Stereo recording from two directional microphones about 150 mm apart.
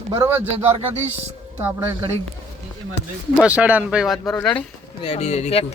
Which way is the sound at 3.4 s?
10° right (ahead or behind).